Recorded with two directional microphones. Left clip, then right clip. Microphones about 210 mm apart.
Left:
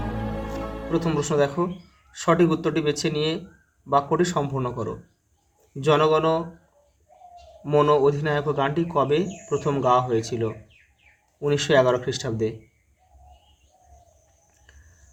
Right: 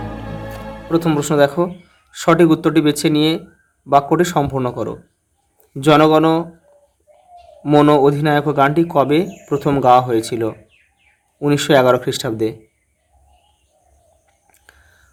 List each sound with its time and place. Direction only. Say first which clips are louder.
0.9 s speech: right 8 dB; 35° right (ahead or behind)
7.6 s speech: right 7 dB; 40° right (ahead or behind)